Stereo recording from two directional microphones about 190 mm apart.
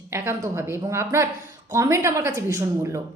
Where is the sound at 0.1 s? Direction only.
15° right (ahead or behind).